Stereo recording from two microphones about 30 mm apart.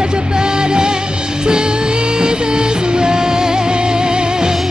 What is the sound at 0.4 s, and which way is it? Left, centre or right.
Music, right.